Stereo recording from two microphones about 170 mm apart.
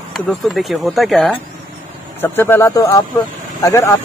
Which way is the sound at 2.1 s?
10° left (ahead or behind).